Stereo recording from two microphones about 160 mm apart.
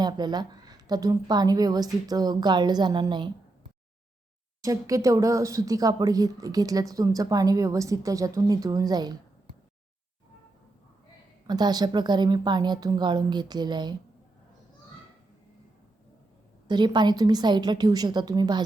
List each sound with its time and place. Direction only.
0.0 s speech: 25° right (ahead or behind)
4.6 s speech: 20° right (ahead or behind)
11.4 s speech: 25° right (ahead or behind)
16.6 s speech: 30° right (ahead or behind)